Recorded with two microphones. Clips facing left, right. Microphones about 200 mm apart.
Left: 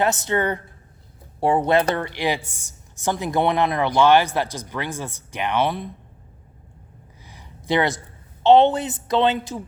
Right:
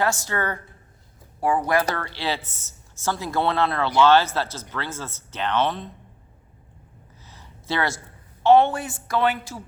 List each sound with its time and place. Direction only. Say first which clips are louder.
0.0 s a woman's voice: left 4 dB; 20° left (ahead or behind)
7.3 s a sound: left 6 dB; 15° left (ahead or behind)
8.4 s a woman's voice: left 2 dB; 20° left (ahead or behind)